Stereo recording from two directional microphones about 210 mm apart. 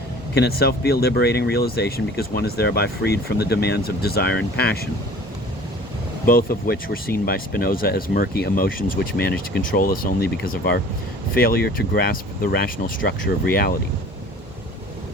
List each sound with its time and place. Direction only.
0.3 s speech: 50° left (ahead or behind)
6.2 s speech: 45° left (ahead or behind)